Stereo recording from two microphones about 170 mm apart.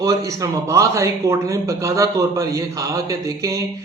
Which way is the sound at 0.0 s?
20° right (ahead or behind).